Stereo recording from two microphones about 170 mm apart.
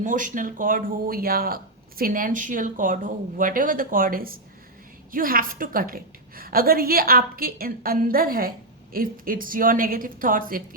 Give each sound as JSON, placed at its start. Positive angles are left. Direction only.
{"t": 0.0, "sound": "a woman's voice", "side_deg": -50}